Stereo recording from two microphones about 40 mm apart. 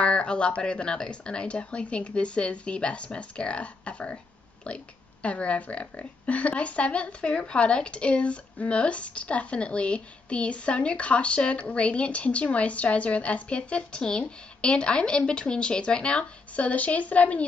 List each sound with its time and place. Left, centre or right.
0.0 s speech: left